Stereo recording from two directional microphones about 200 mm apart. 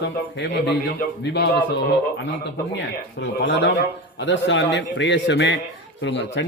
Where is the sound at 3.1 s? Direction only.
60° left (ahead or behind).